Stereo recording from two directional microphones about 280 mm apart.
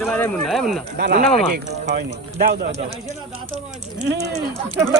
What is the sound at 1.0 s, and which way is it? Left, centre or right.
Speech, right.